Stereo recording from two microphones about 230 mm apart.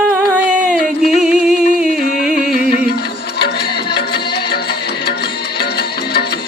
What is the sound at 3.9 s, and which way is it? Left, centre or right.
Music, left.